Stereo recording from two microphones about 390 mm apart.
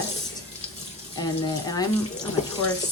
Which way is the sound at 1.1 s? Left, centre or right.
Centre.